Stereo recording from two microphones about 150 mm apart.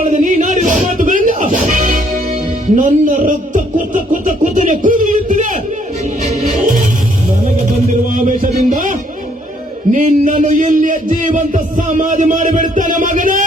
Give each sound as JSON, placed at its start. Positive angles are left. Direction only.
{"t": 0.1, "sound": "music", "side_deg": -60}
{"t": 2.7, "sound": "speech", "side_deg": -55}
{"t": 8.1, "sound": "music", "side_deg": -60}